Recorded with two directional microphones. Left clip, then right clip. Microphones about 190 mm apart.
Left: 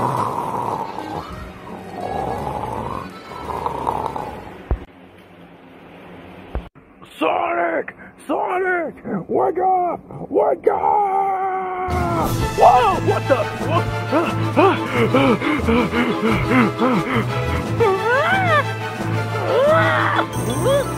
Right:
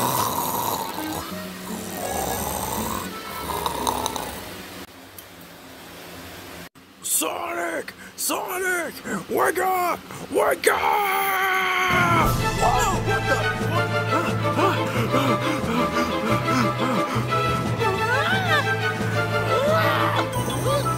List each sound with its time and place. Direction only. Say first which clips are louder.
0.0 s snoring: left 3 dB; 15° right (ahead or behind)
2.1 s music: left 4 dB; 10° right (ahead or behind)
7.2 s speech: left 8 dB; 15° right (ahead or behind)
10.4 s a sound: left 2 dB; 65° right (ahead or behind)
12.3 s music: left 8 dB; centre (ahead or behind)
19.7 s music: left 5 dB; 15° right (ahead or behind)
20.0 s music: left 4 dB; 5° right (ahead or behind)